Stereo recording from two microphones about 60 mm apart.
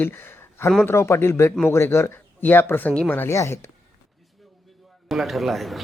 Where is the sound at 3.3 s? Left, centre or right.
Left.